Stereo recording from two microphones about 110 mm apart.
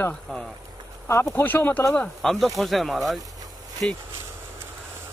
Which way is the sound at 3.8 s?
10° left (ahead or behind).